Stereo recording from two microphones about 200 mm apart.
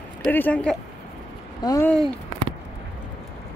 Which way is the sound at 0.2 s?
10° left (ahead or behind).